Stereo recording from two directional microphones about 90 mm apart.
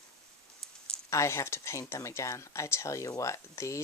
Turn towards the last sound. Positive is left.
turn(degrees=35)  # may be behind; listen again after turning